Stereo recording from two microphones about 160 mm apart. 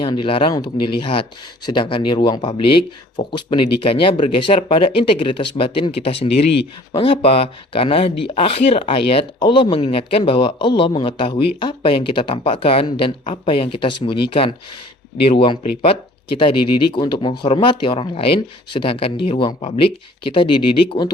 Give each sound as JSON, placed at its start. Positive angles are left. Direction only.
{"t": 0.0, "sound": "speech", "side_deg": 30}